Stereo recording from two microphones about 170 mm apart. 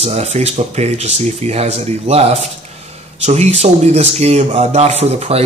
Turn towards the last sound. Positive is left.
turn(degrees=-40)  # may be behind; listen again after turning